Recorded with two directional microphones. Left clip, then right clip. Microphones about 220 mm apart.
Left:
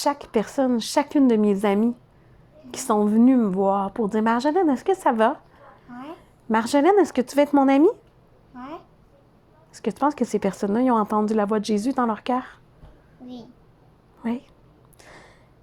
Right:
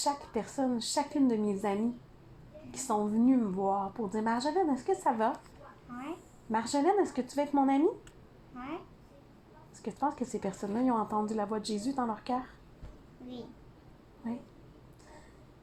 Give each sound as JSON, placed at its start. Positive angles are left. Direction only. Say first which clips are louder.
{"t": 0.0, "sound": "a woman's voice", "louder": "left 10 dB", "side_deg": 40}
{"t": 6.5, "sound": "a woman's voice", "louder": "left 11 dB", "side_deg": 45}
{"t": 8.5, "sound": "a sound", "louder": "left 4 dB", "side_deg": 30}
{"t": 9.7, "sound": "a woman's voice", "louder": "left 11 dB", "side_deg": 40}